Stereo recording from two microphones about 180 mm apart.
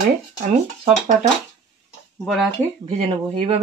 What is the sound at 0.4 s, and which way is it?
Speech, 40° right (ahead or behind).